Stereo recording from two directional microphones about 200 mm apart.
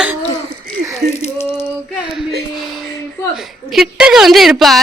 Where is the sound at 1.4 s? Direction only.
10° left (ahead or behind).